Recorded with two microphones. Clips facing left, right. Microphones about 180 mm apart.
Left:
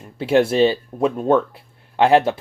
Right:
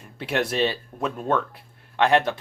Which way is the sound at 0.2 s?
30° left (ahead or behind).